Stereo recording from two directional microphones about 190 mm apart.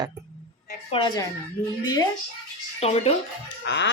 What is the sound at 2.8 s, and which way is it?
Speech, 35° left (ahead or behind).